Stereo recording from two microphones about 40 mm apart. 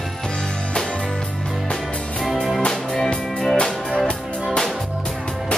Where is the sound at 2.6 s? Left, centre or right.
Centre.